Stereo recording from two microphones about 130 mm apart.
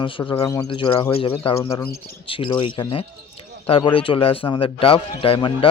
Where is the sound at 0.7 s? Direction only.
40° left (ahead or behind).